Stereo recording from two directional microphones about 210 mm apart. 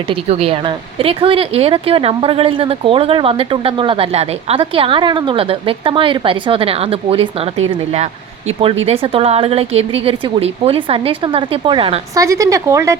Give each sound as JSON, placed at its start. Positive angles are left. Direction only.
{"t": 0.1, "sound": "speech", "side_deg": -30}
{"t": 8.8, "sound": "speech", "side_deg": -30}